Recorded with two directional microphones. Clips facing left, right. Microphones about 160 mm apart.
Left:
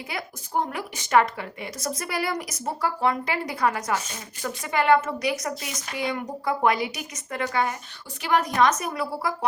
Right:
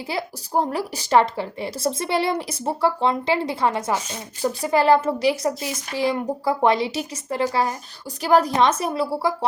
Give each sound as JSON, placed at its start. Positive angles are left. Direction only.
{"t": 0.1, "sound": "a woman's voice", "side_deg": -30}